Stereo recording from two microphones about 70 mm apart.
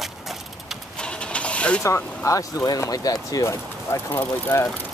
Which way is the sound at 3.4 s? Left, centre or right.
Left.